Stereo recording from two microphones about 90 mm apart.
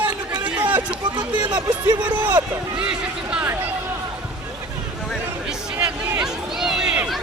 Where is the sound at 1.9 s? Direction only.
60° right (ahead or behind).